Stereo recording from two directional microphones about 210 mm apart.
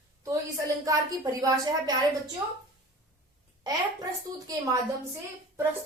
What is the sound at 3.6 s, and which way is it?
A woman's voice, 15° right (ahead or behind).